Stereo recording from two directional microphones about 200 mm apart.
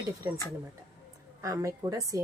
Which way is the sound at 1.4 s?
15° right (ahead or behind).